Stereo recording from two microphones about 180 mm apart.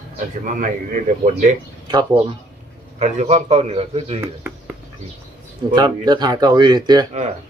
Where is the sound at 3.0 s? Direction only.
40° right (ahead or behind).